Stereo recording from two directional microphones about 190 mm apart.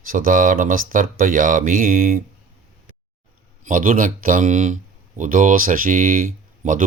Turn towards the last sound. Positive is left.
turn(degrees=-45)  # may be behind; listen again after turning